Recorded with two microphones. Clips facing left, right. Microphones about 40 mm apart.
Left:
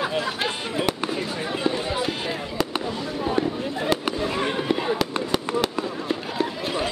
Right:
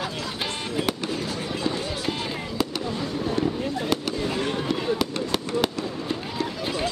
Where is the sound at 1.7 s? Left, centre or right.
Centre.